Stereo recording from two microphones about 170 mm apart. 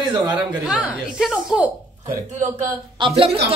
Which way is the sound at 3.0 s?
35° right (ahead or behind).